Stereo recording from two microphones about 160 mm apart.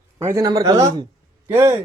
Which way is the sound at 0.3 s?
20° right (ahead or behind).